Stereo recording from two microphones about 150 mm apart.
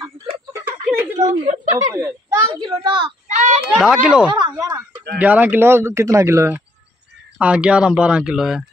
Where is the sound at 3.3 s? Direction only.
55° right (ahead or behind).